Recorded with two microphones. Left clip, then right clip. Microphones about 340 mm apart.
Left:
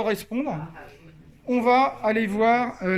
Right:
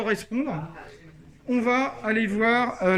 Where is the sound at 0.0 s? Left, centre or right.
Centre.